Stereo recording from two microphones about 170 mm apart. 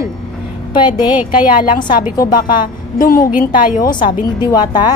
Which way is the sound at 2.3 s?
55° left (ahead or behind).